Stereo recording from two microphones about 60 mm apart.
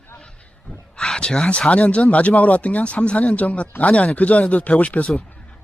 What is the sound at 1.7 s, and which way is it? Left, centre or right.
A man's voice, left.